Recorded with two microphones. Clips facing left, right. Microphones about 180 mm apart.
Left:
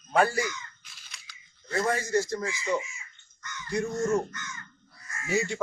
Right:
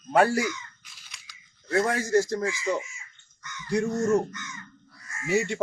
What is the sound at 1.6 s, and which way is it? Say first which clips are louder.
Speech: right 3 dB; 60° right (ahead or behind).